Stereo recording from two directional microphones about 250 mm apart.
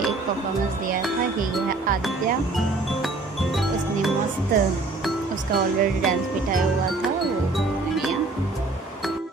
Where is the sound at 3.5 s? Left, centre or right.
Centre.